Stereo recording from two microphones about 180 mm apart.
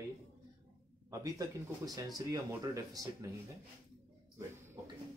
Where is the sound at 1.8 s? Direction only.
20° right (ahead or behind).